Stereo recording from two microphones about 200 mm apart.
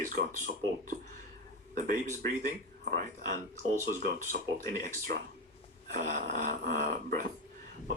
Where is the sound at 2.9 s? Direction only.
40° right (ahead or behind).